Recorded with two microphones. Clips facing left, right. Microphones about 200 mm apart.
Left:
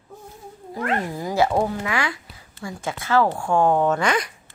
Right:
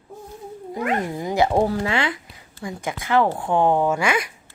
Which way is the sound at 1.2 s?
20° right (ahead or behind).